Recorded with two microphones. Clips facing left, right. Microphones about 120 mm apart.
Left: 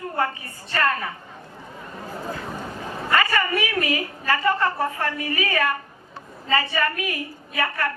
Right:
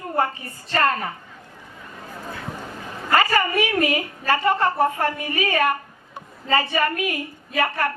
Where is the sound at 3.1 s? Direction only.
30° right (ahead or behind).